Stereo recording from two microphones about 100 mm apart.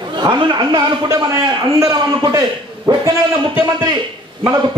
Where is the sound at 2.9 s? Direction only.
45° right (ahead or behind).